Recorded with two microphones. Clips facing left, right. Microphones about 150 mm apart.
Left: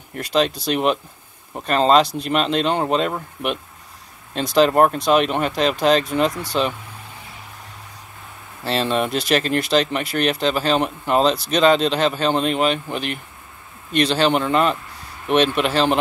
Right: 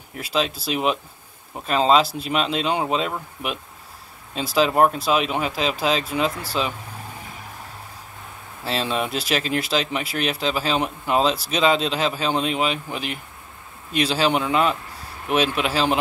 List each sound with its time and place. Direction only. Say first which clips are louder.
0.1 s speech: left 5 dB; centre (ahead or behind)
8.6 s speech: left 4 dB; centre (ahead or behind)